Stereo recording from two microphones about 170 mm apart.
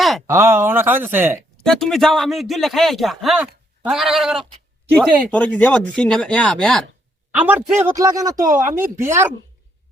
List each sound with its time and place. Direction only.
0.3 s speech: 15° right (ahead or behind)
1.6 s speech: 5° left (ahead or behind)
4.9 s speech: 10° left (ahead or behind)
7.3 s a man's voice: 10° right (ahead or behind)